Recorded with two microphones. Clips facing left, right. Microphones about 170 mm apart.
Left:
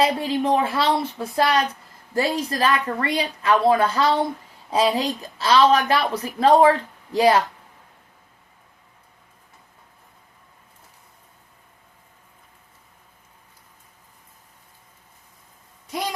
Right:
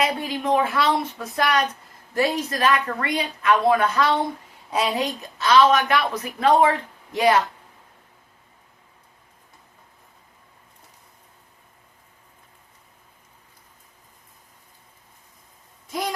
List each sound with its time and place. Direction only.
0.0 s a woman's voice: 30° left (ahead or behind)